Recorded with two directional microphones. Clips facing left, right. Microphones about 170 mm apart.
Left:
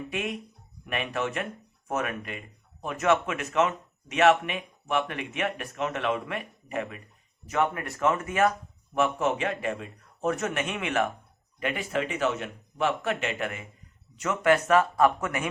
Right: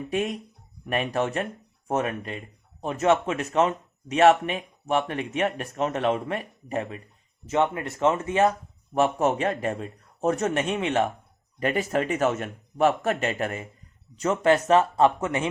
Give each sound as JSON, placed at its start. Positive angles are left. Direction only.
{"t": 0.1, "sound": "speech", "side_deg": -35}
{"t": 7.4, "sound": "a man's voice", "side_deg": -25}
{"t": 9.0, "sound": "speech", "side_deg": -40}
{"t": 11.6, "sound": "a man's voice", "side_deg": -40}